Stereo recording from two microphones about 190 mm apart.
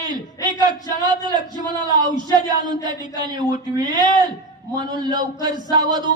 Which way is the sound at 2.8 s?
20° right (ahead or behind).